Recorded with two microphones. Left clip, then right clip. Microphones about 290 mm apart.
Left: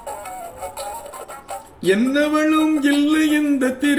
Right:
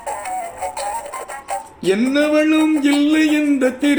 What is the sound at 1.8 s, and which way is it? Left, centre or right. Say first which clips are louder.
Speech: right 1 dB; centre.